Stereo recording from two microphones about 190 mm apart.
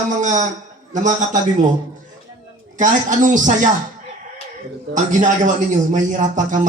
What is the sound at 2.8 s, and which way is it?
Speech, 40° right (ahead or behind).